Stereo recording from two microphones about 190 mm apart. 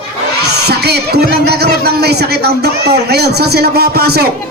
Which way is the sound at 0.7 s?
60° right (ahead or behind).